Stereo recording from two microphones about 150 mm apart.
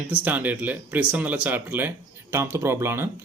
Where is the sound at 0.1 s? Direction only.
10° right (ahead or behind).